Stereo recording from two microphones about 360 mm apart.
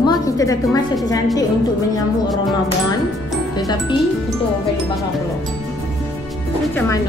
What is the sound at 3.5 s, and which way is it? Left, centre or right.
Speech, centre.